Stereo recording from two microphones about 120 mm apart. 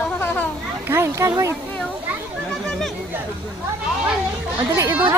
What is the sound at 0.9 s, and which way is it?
Speech, 20° right (ahead or behind).